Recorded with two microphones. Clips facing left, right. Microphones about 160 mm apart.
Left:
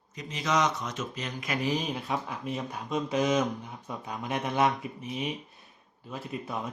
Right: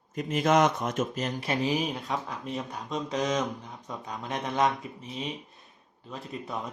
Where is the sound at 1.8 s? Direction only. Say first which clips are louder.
Right 1 dB; centre (ahead or behind).